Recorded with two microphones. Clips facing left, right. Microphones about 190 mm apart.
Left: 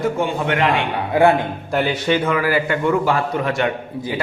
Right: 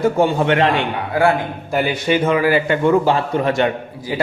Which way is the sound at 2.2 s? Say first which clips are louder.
Right 3 dB; 25° right (ahead or behind).